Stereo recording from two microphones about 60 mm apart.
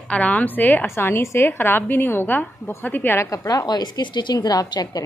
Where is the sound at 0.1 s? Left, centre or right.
Left.